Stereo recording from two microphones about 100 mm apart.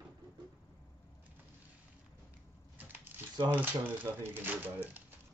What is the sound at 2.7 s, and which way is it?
Crumpling, 20° right (ahead or behind).